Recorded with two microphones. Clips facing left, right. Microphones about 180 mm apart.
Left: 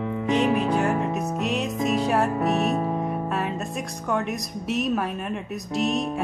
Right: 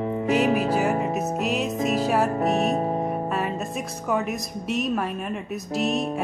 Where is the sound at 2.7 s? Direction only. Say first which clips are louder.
Right 1 dB; 30° right (ahead or behind).